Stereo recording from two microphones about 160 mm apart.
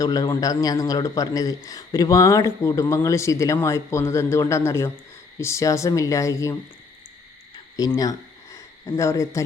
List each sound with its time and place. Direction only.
0.0 s a man's voice: 25° left (ahead or behind)
7.8 s a man's voice: 20° left (ahead or behind)